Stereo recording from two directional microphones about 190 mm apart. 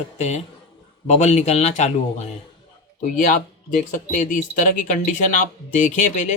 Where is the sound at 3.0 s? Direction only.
45° left (ahead or behind).